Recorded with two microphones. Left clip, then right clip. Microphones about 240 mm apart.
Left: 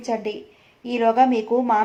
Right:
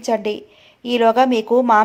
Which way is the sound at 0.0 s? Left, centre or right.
Right.